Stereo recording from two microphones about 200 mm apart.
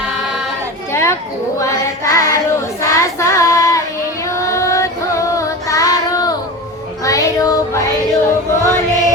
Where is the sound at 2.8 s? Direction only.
15° left (ahead or behind).